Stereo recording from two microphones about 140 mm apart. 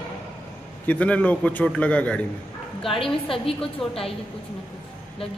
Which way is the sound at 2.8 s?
40° left (ahead or behind).